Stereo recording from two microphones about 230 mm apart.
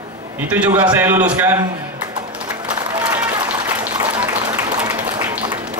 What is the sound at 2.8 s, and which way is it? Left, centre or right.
Applause, centre.